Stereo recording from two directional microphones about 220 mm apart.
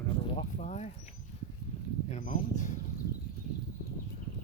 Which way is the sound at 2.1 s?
35° left (ahead or behind).